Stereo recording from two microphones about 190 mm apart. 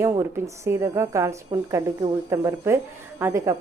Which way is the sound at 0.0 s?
15° right (ahead or behind).